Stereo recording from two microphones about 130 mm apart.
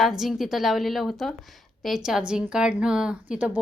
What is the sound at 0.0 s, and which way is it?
A woman's voice, centre (ahead or behind).